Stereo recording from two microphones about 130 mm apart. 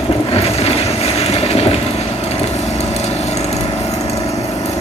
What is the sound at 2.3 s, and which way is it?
Wood, 55° left (ahead or behind).